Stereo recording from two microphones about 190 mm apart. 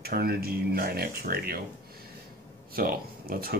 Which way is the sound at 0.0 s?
55° right (ahead or behind).